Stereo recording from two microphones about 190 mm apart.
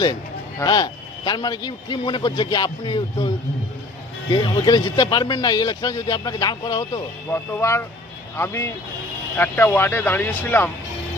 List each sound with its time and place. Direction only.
0.6 s speech: 20° left (ahead or behind)